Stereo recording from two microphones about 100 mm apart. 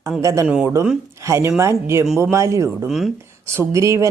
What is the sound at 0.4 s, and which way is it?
Speech, 10° right (ahead or behind).